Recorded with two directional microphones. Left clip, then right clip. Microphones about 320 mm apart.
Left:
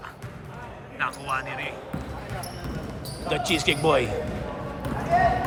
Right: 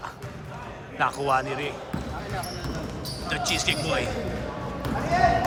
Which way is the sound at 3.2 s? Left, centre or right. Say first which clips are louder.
Left 2 dB; centre.